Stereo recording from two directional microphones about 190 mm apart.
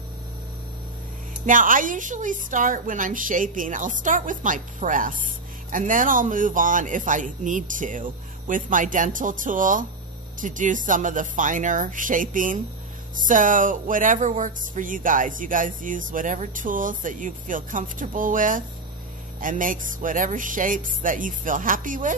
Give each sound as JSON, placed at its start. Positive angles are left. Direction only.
{"t": 1.4, "sound": "speech", "side_deg": -45}